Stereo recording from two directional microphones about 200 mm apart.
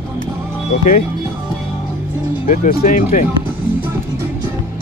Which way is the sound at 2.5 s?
45° left (ahead or behind).